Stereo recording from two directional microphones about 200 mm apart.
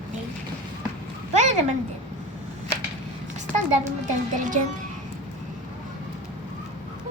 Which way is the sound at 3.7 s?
40° right (ahead or behind).